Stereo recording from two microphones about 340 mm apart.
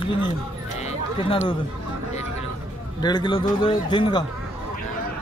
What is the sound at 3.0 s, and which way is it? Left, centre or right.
A man's voice, centre.